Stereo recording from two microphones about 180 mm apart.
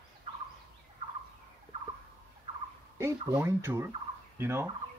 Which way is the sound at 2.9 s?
15° right (ahead or behind).